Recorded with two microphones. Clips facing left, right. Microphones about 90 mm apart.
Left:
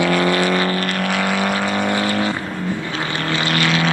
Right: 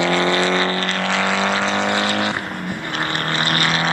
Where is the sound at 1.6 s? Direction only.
90° right.